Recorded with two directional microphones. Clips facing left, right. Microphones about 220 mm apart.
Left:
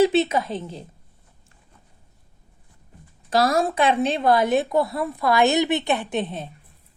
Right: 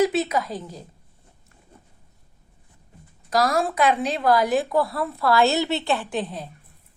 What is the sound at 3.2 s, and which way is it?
Speech, 30° left (ahead or behind).